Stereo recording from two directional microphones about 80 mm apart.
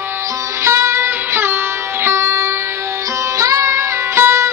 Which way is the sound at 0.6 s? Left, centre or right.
Right.